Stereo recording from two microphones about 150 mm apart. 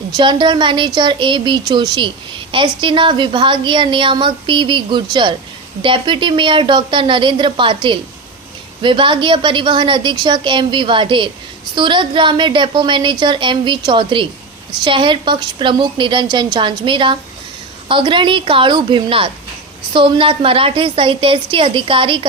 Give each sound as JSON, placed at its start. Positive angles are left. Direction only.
{"t": 0.2, "sound": "a woman's voice", "side_deg": -30}